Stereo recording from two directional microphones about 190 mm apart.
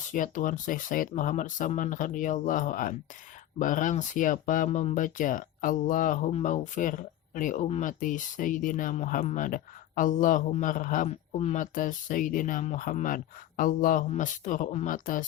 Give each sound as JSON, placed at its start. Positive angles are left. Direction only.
{"t": 0.1, "sound": "speech", "side_deg": 45}